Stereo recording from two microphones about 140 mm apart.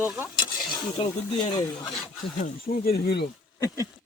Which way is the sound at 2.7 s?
90° left.